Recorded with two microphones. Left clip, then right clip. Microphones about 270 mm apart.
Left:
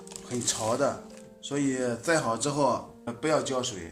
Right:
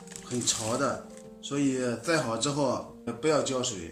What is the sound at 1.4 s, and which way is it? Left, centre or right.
Speech, left.